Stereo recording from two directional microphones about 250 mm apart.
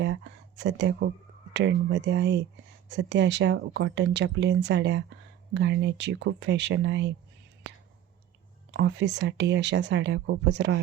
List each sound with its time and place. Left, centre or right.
0.0 s speech: right
8.7 s speech: right